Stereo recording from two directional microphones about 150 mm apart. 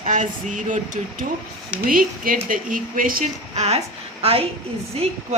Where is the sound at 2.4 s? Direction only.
65° right (ahead or behind).